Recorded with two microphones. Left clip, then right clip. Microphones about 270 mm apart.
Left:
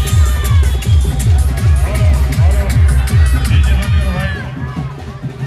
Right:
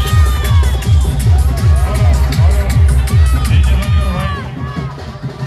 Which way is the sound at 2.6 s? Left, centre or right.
Centre.